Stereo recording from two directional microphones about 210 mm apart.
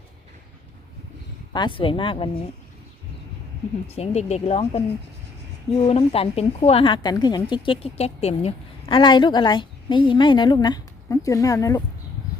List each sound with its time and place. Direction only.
1.5 s speech: 25° left (ahead or behind)
3.8 s speech: 30° left (ahead or behind)